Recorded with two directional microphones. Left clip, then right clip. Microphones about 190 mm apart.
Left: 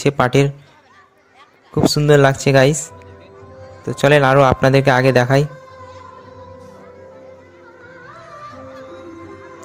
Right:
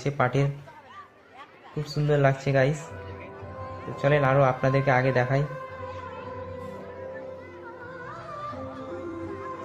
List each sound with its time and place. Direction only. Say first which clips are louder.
0.0 s speech: left 11 dB; 60° left (ahead or behind)
2.0 s speech: left 10 dB; 55° left (ahead or behind)
3.9 s speech: left 11 dB; 60° left (ahead or behind)